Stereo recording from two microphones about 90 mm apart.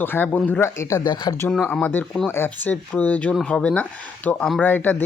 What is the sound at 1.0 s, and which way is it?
Speech, 55° left (ahead or behind).